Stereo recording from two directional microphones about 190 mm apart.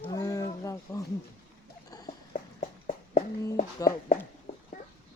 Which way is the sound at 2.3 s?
45° left (ahead or behind).